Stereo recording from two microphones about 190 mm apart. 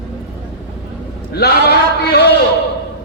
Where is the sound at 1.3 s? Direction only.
60° left (ahead or behind).